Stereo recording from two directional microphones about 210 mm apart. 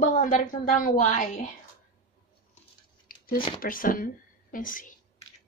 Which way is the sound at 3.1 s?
45° left (ahead or behind).